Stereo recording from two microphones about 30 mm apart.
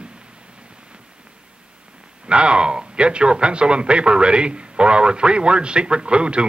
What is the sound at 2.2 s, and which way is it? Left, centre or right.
Speech, right.